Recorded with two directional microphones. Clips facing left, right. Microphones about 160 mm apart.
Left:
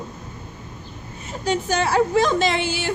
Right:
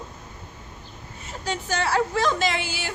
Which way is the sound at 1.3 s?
15° left (ahead or behind).